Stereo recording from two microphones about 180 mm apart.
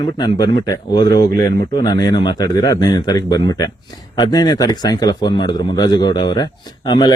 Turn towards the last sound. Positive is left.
turn(degrees=25)  # may be behind; listen again after turning